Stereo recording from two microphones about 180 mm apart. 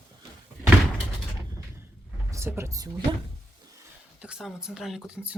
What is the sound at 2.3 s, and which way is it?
Speech, 15° right (ahead or behind).